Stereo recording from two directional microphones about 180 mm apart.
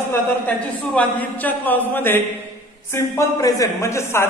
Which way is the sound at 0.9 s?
10° left (ahead or behind).